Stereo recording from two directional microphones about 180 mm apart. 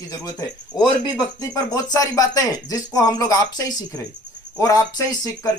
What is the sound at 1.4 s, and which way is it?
Speech, 20° left (ahead or behind).